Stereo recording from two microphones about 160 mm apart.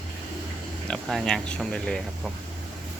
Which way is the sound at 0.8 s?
5° left (ahead or behind).